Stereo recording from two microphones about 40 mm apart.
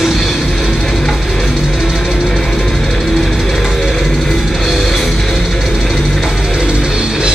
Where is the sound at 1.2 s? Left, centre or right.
Centre.